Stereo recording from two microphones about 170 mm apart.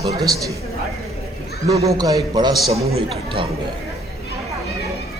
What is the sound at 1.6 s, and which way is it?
Speech, 20° right (ahead or behind).